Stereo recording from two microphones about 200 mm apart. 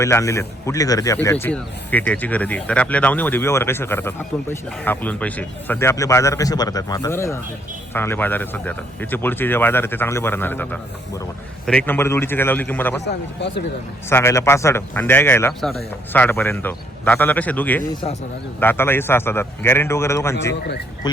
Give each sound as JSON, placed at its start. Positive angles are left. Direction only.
{"t": 0.0, "sound": "speech", "side_deg": 15}
{"t": 13.1, "sound": "speech", "side_deg": 60}
{"t": 14.1, "sound": "speech", "side_deg": 15}